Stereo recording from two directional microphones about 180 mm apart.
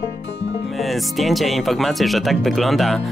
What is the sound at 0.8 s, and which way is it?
Speech, centre (ahead or behind).